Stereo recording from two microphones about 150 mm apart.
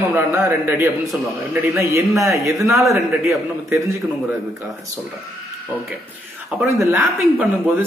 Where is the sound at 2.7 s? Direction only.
Centre (ahead or behind).